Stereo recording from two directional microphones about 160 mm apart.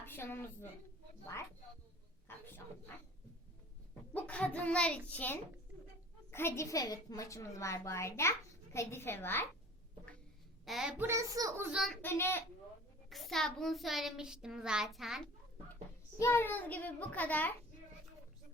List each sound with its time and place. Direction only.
0.0 s a woman's voice: 15° left (ahead or behind)
4.1 s a woman's voice: 10° left (ahead or behind)
10.7 s a child's voice: 5° right (ahead or behind)
11.0 s a child's voice: 20° right (ahead or behind)
12.0 s a woman's voice: 15° left (ahead or behind)
13.1 s a child's voice: centre (ahead or behind)
15.7 s a child's voice: 15° left (ahead or behind)